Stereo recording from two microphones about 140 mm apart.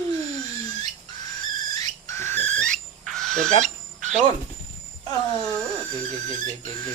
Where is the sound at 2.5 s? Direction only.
5° left (ahead or behind).